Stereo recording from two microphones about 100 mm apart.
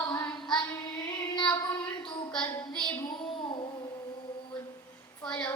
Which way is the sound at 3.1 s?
55° left (ahead or behind).